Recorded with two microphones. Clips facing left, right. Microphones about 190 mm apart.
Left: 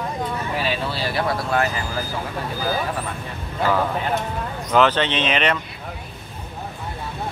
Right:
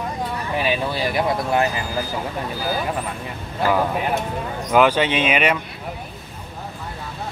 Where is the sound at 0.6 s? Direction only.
15° right (ahead or behind).